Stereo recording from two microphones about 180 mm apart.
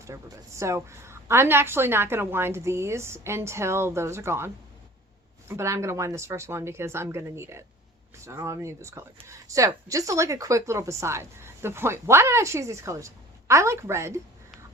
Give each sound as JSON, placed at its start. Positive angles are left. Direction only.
{"t": 0.0, "sound": "a woman's voice", "side_deg": -15}